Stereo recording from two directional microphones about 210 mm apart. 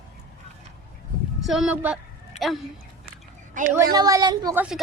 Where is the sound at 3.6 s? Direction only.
35° right (ahead or behind).